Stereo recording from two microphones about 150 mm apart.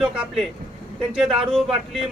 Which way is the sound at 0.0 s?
5° right (ahead or behind).